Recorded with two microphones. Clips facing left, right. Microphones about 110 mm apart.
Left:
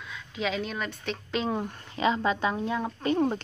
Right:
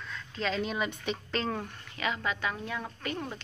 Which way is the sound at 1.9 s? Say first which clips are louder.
Left 7 dB; 30° left (ahead or behind).